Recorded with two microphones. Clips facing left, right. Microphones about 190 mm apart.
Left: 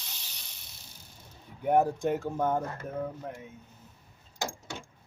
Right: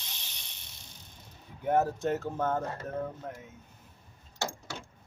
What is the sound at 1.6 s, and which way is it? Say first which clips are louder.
Speech: left 2 dB; 15° left (ahead or behind).